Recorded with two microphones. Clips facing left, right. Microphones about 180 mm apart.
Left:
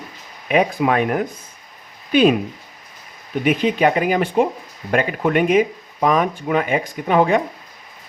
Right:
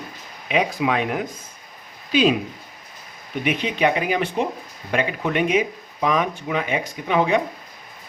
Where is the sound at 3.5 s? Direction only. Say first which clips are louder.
Left 4 dB; 45° left (ahead or behind).